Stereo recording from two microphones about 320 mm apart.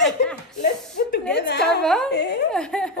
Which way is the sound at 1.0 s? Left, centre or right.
Left.